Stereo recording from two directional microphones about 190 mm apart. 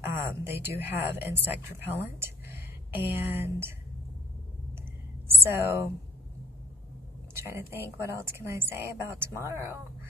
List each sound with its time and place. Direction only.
0.0 s a woman's voice: 10° right (ahead or behind)
5.3 s a woman's voice: 10° right (ahead or behind)
7.3 s a woman's voice: 15° right (ahead or behind)